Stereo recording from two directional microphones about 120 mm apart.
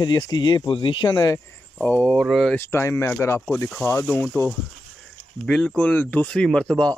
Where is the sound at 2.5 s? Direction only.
20° left (ahead or behind).